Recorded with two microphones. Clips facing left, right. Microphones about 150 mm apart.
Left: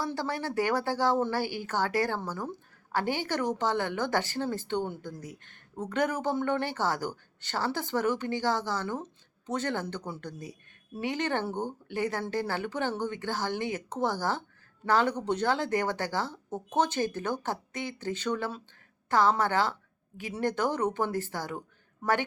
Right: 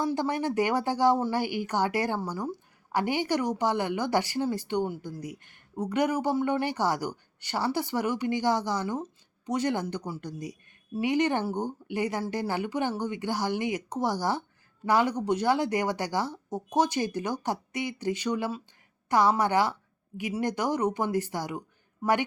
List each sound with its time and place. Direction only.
0.0 s speech: 20° right (ahead or behind)